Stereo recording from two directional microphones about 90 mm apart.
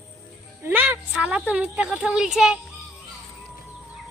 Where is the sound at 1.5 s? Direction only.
10° right (ahead or behind).